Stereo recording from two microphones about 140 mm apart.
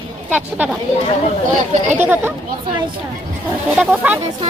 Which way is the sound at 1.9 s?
15° right (ahead or behind).